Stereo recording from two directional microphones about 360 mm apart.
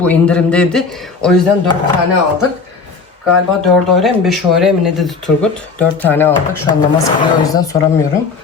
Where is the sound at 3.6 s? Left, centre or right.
Centre.